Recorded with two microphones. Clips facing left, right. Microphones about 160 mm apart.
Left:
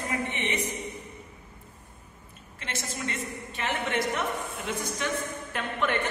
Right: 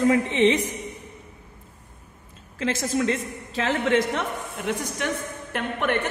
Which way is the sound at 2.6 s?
90° right.